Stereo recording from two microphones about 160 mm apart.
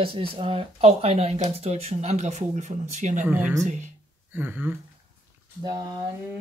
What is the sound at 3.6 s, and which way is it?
Speech, 50° right (ahead or behind).